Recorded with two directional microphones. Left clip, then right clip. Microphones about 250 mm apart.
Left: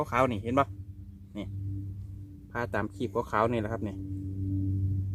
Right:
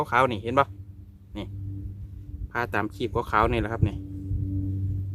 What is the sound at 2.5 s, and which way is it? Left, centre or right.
Speech, centre.